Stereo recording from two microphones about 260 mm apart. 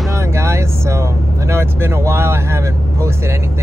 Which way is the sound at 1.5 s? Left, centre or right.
Centre.